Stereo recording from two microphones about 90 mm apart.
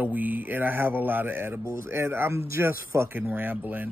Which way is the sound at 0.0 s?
20° right (ahead or behind).